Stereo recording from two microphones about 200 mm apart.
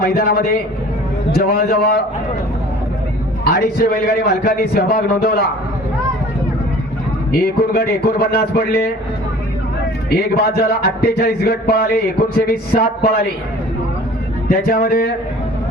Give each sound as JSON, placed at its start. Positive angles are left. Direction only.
{"t": 0.0, "sound": "a man's voice", "side_deg": 50}
{"t": 3.4, "sound": "a man's voice", "side_deg": 50}
{"t": 7.4, "sound": "a man's voice", "side_deg": 50}
{"t": 10.1, "sound": "a man's voice", "side_deg": 50}
{"t": 14.5, "sound": "a man's voice", "side_deg": 50}